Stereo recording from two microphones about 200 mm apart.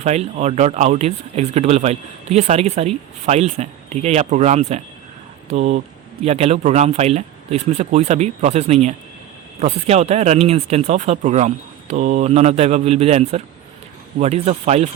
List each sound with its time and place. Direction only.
0.0 s speech: 35° right (ahead or behind)